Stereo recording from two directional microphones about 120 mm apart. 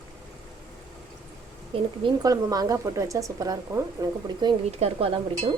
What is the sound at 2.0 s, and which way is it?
A woman's voice, 35° right (ahead or behind).